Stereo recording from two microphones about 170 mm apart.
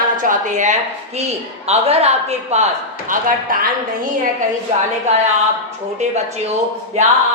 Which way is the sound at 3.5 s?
55° right (ahead or behind).